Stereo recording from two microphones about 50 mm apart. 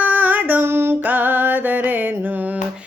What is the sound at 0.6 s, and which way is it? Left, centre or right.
Female singing, right.